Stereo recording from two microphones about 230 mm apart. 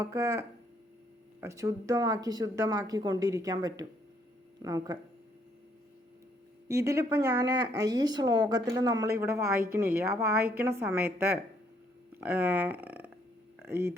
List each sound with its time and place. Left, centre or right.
0.0 s speech: centre
6.7 s speech: centre